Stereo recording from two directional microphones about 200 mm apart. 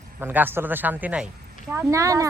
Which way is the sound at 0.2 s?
10° right (ahead or behind).